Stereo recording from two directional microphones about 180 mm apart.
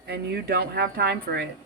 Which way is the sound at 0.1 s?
60° right (ahead or behind).